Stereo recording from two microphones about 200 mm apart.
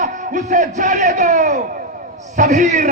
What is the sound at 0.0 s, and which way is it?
A man's voice, 40° right (ahead or behind).